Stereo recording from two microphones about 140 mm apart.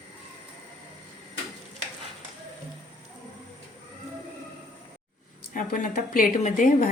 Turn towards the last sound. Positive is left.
turn(degrees=65)  # may be behind; listen again after turning